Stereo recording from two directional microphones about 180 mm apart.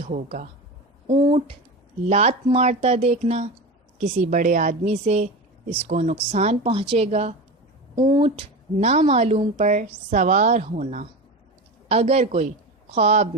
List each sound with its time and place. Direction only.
0.1 s speech: 45° right (ahead or behind)
1.1 s speech: 30° right (ahead or behind)
7.9 s speech: 25° right (ahead or behind)